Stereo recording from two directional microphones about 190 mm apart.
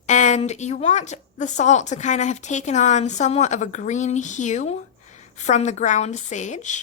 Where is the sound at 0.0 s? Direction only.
40° left (ahead or behind).